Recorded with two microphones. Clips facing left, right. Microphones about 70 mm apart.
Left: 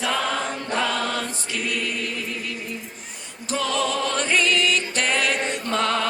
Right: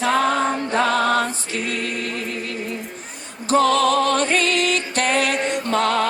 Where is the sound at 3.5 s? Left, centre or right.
Right.